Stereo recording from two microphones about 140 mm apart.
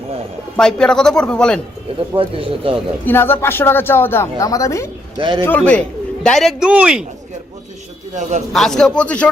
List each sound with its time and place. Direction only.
0.5 s speech: 5° left (ahead or behind)
2.1 s speech: 40° right (ahead or behind)
3.0 s speech: 15° left (ahead or behind)
5.1 s speech: 35° right (ahead or behind)
5.5 s speech: 10° left (ahead or behind); by 7.0 s 5° right (ahead or behind)
8.5 s speech: 5° left (ahead or behind)